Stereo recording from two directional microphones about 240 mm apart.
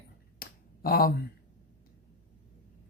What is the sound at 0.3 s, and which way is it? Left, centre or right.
Finger snapping, left.